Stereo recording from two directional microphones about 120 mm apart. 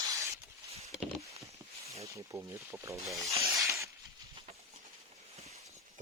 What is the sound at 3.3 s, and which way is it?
Rub, 25° right (ahead or behind).